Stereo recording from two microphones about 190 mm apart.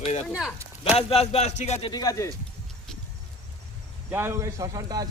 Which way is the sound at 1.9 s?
20° left (ahead or behind).